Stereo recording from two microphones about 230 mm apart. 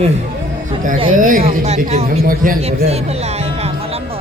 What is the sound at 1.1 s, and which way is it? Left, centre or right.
A man's voice, right.